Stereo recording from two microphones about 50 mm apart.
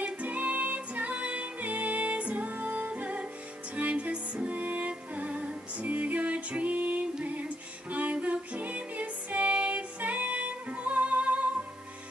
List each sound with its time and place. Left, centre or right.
0.0 s music: right